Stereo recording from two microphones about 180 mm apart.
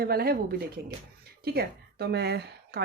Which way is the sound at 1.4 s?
60° right (ahead or behind).